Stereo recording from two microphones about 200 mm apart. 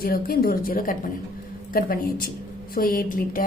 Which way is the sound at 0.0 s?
50° left (ahead or behind).